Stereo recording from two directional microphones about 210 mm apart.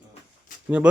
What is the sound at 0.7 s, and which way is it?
Speech, 5° right (ahead or behind).